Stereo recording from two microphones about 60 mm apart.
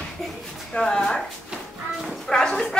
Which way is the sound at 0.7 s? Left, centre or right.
Centre.